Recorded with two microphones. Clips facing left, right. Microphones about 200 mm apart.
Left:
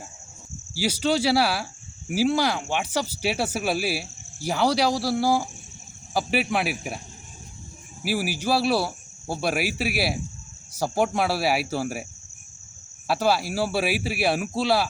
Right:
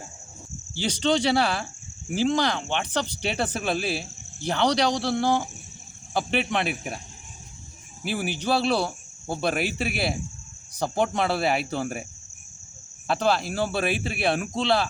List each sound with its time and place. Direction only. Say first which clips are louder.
0.7 s speech: even; 5° left (ahead or behind)
8.0 s speech: left 1 dB; 5° left (ahead or behind)
13.1 s speech: left 1 dB; 5° left (ahead or behind)